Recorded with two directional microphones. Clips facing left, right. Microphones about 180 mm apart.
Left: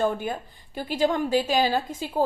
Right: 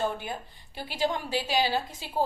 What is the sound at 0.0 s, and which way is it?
A woman's voice, 50° left (ahead or behind).